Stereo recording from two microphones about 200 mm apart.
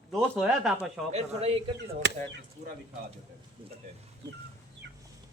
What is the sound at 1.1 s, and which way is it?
Speech, 30° right (ahead or behind).